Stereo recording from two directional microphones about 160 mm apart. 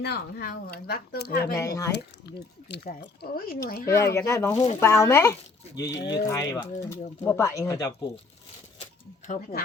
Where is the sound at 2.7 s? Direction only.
90° left.